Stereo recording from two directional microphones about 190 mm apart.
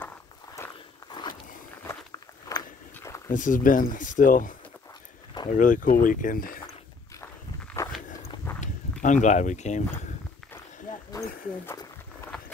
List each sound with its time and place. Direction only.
0.6 s walk: 15° left (ahead or behind)
1.9 s walk: 20° left (ahead or behind)
3.3 s speech: 45° left (ahead or behind)
7.8 s walk: 15° left (ahead or behind)
9.0 s speech: 40° left (ahead or behind)